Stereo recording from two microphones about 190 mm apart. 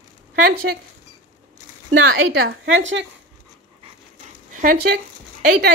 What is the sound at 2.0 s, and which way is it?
A woman's voice, 80° right.